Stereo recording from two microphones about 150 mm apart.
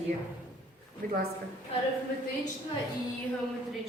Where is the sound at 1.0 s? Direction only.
75° right (ahead or behind).